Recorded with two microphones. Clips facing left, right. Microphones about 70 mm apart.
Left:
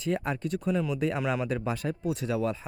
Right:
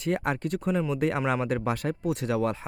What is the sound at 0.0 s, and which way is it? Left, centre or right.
Speech, right.